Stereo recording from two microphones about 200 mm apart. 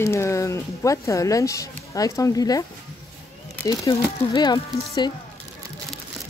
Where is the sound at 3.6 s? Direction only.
20° left (ahead or behind).